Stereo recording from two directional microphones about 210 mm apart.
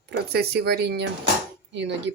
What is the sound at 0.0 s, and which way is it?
Speech, 50° right (ahead or behind).